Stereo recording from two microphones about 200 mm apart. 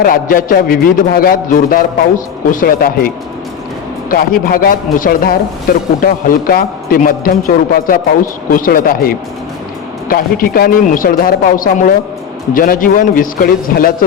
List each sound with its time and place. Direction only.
0.0 s a man's voice: 45° left (ahead or behind)
4.1 s a man's voice: 45° left (ahead or behind)